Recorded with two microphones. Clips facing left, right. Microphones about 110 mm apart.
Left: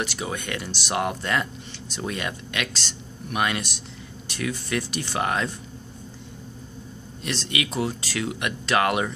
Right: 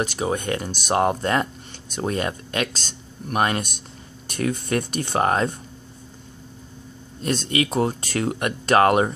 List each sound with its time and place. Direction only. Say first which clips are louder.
0.0 s speech: right 6 dB; 40° right (ahead or behind)
7.2 s speech: right 6 dB; 45° right (ahead or behind)